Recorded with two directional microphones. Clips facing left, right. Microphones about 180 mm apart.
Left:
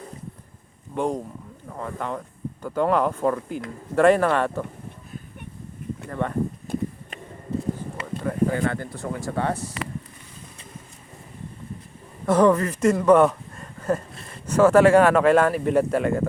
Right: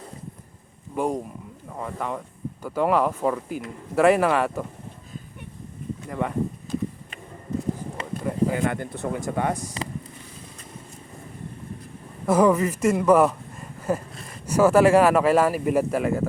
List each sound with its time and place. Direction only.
0.9 s speech: 5° right (ahead or behind)
6.1 s speech: 10° right (ahead or behind)
6.7 s a sound: 60° left (ahead or behind)
8.2 s speech: 10° right (ahead or behind)
12.2 s a man's voice: 10° right (ahead or behind)